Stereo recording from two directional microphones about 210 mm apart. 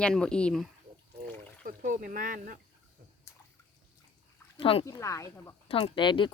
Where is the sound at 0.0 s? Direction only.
5° left (ahead or behind).